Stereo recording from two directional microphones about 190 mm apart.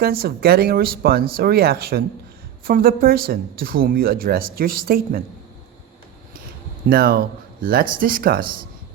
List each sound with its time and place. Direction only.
0.0 s speech: 55° right (ahead or behind)
6.8 s speech: 50° right (ahead or behind)